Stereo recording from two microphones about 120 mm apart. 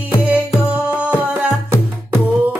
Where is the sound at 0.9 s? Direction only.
10° right (ahead or behind).